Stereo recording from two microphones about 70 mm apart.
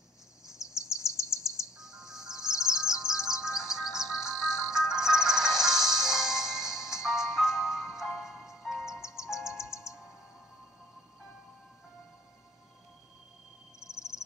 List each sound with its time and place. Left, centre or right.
1.4 s music: centre
4.4 s music: left
4.6 s music: centre
13.8 s cricket: left